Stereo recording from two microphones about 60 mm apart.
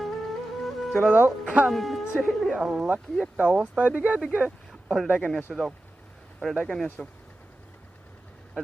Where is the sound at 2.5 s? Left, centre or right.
Centre.